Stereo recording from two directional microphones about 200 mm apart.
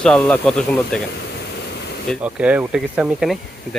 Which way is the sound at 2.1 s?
5° right (ahead or behind).